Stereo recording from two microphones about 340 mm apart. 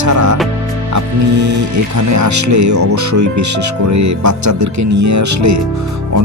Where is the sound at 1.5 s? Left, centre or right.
Right.